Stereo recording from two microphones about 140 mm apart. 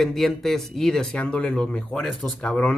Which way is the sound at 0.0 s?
Centre (ahead or behind).